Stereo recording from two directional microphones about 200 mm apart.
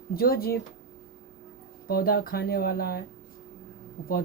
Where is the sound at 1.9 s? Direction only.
50° left (ahead or behind).